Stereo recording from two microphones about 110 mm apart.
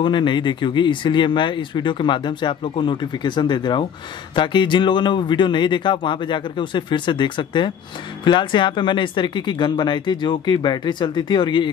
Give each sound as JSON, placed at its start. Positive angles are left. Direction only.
{"t": 0.0, "sound": "speech", "side_deg": 45}